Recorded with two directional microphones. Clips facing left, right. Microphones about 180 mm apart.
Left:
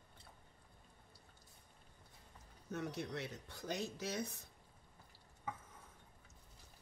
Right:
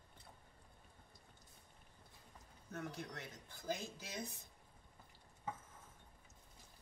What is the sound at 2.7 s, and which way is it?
Speech, 75° left (ahead or behind).